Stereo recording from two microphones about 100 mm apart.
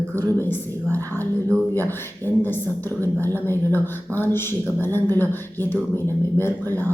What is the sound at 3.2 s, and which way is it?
Speech, 20° left (ahead or behind).